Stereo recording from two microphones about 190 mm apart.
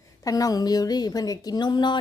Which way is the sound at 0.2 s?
20° left (ahead or behind).